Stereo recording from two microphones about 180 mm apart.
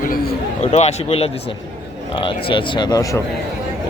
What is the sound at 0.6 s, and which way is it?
Speech, 40° left (ahead or behind).